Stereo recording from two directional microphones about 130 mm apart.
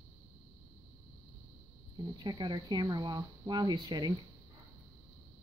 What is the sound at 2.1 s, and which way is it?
Speech, 35° right (ahead or behind).